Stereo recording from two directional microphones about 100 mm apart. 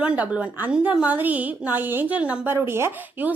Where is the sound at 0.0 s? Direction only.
15° right (ahead or behind).